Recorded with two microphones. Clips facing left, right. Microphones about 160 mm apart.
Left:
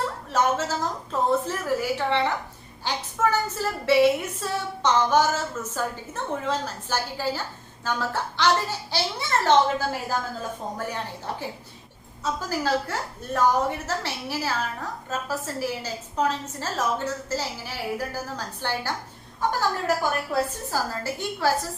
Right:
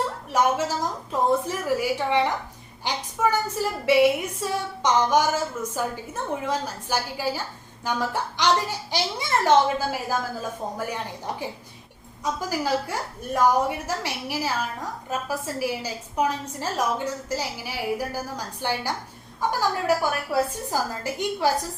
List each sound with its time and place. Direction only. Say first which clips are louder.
0.3 s a woman's voice: right 1 dB; 15° right (ahead or behind)